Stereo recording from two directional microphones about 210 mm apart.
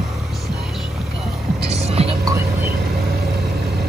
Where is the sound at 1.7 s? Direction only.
30° right (ahead or behind).